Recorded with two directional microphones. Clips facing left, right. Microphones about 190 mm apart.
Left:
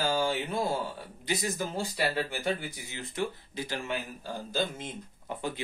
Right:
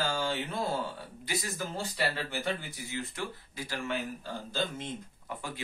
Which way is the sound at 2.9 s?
20° left (ahead or behind).